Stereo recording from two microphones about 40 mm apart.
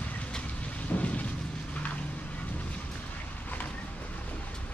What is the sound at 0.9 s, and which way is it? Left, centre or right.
Thunder, left.